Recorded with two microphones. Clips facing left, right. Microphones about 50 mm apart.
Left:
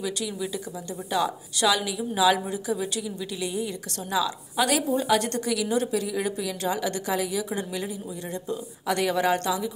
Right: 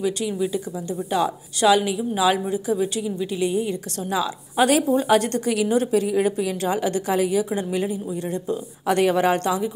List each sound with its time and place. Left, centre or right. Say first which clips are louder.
0.0 s a woman's voice: right 7 dB; right